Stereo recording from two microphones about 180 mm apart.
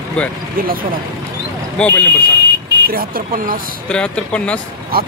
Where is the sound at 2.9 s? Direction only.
55° right (ahead or behind).